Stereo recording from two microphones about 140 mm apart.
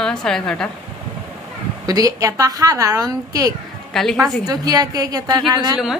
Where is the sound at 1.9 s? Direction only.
25° right (ahead or behind).